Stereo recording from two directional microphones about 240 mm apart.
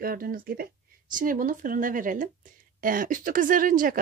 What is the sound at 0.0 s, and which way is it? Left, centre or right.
Speech, right.